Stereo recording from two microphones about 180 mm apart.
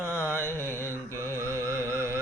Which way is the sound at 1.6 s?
15° right (ahead or behind).